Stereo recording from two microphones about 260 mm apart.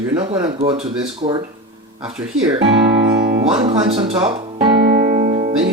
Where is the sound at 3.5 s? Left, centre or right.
Right.